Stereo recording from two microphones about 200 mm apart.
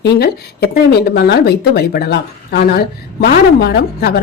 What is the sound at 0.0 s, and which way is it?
Speech, 50° left (ahead or behind).